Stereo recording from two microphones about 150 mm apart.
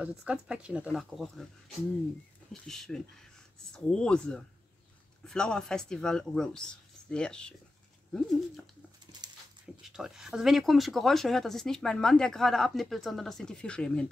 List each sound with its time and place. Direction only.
0.2 s speech: 5° right (ahead or behind)
2.5 s speech: 5° left (ahead or behind)
9.8 s speech: 5° right (ahead or behind)